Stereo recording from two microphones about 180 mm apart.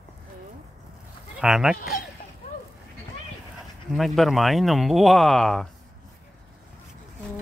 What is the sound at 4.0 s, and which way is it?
Speech, centre (ahead or behind).